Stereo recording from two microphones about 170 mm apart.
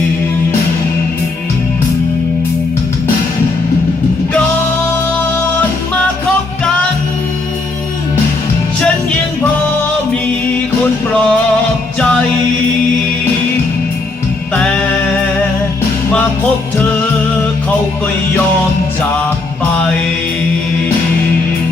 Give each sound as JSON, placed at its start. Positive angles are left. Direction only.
{"t": 11.1, "sound": "music", "side_deg": 5}
{"t": 14.5, "sound": "music", "side_deg": 5}